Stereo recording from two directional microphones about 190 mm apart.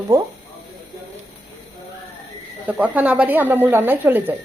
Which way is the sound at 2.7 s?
5° right (ahead or behind).